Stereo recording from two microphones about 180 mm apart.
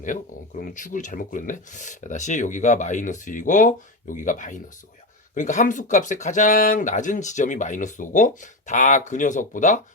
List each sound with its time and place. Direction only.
0.6 s speech: 45° left (ahead or behind)